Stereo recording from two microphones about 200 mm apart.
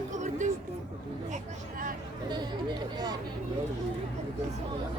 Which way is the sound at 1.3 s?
40° right (ahead or behind).